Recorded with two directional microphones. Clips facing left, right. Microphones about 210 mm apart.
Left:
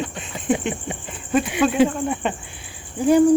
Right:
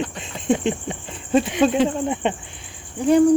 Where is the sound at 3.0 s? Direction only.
5° left (ahead or behind).